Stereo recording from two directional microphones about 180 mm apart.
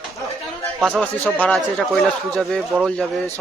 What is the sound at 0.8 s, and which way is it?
Speech, centre (ahead or behind).